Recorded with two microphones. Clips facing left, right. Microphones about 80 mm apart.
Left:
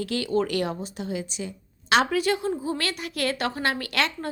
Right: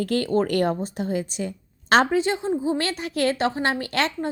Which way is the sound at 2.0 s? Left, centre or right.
Right.